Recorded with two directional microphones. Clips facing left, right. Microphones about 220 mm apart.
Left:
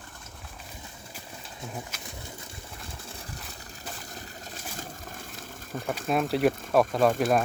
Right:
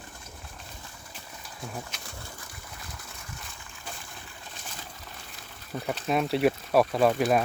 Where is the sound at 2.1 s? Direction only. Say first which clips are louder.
Left 2 dB; 20° left (ahead or behind); by 5.8 s 45° left (ahead or behind).